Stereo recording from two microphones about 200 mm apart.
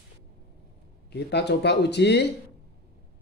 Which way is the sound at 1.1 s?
60° left (ahead or behind).